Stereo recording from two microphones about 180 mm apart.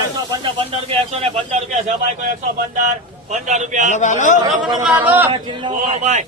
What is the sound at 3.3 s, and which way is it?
Speech, 40° right (ahead or behind).